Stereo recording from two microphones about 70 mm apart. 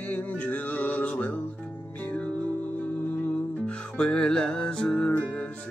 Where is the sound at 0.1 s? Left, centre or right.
Left.